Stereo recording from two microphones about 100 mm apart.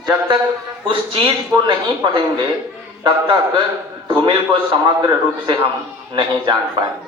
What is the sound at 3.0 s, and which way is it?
A man's voice, 55° right (ahead or behind).